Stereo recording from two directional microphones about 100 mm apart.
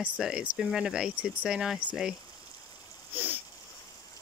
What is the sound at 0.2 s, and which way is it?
Speech, 5° right (ahead or behind).